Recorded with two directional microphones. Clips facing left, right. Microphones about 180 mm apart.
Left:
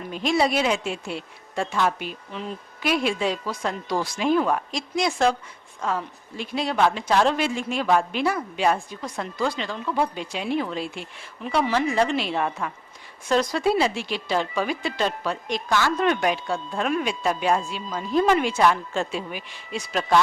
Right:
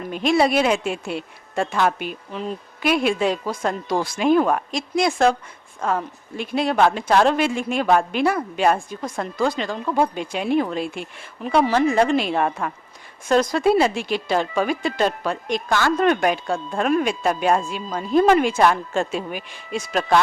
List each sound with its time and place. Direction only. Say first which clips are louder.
0.1 s a woman's voice: right 4 dB; 60° right (ahead or behind)